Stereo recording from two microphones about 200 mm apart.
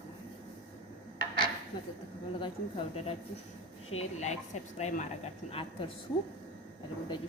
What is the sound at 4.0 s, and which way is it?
A woman's voice, 35° left (ahead or behind).